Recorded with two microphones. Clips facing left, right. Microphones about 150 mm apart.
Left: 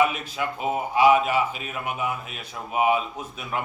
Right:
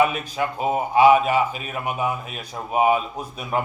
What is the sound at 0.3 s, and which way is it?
A man's voice, 35° right (ahead or behind).